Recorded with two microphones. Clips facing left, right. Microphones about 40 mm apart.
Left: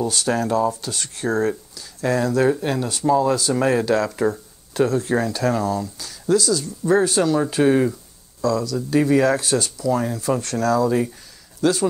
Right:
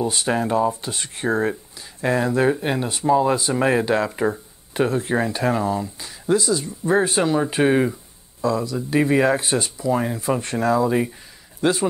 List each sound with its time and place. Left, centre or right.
0.0 s speech: right